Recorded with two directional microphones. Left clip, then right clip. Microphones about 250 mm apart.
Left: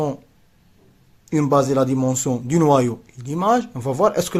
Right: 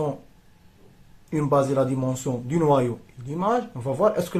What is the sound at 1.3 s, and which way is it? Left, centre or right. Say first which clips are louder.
Speech: left 4 dB; left.